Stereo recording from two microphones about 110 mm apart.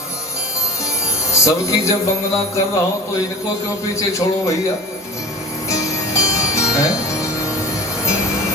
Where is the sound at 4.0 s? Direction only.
30° left (ahead or behind).